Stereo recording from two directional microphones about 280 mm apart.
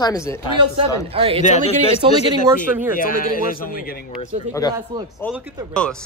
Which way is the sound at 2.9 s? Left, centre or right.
Left.